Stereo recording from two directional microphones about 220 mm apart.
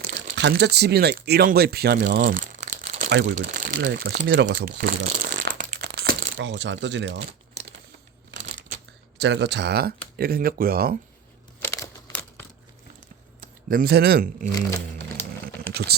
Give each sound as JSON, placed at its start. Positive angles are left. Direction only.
{"t": 0.3, "sound": "speech", "side_deg": -50}
{"t": 3.1, "sound": "speech", "side_deg": -55}
{"t": 3.4, "sound": "speech", "side_deg": -40}
{"t": 5.0, "sound": "a sound", "side_deg": -35}
{"t": 5.9, "sound": "crumpling", "side_deg": -45}
{"t": 6.3, "sound": "speech", "side_deg": -55}
{"t": 7.2, "sound": "crumpling", "side_deg": -30}
{"t": 8.3, "sound": "a sound", "side_deg": -55}
{"t": 10.2, "sound": "speech", "side_deg": -40}
{"t": 11.6, "sound": "crumpling", "side_deg": 10}
{"t": 13.7, "sound": "speech", "side_deg": -45}